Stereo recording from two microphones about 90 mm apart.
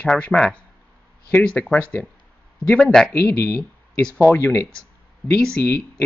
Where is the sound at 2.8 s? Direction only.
5° left (ahead or behind).